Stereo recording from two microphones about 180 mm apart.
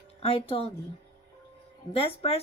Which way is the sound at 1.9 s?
35° left (ahead or behind).